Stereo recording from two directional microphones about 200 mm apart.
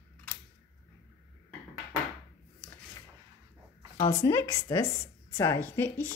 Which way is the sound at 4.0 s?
20° left (ahead or behind).